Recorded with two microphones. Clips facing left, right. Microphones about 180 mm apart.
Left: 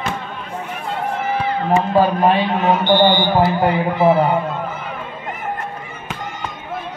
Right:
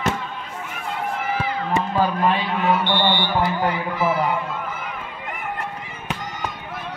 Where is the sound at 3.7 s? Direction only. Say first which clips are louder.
Left 7 dB; 30° left (ahead or behind).